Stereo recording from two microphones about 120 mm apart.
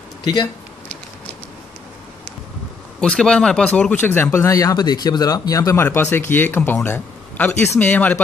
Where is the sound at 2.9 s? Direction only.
5° left (ahead or behind).